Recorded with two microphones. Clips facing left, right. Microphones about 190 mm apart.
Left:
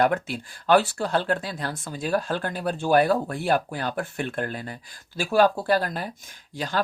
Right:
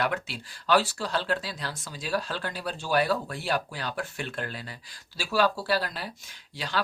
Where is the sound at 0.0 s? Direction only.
50° left (ahead or behind).